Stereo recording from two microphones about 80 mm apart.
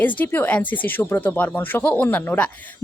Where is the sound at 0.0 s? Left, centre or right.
Left.